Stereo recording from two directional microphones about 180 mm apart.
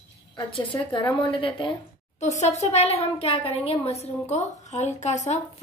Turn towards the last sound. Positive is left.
turn(degrees=40)  # may be behind; listen again after turning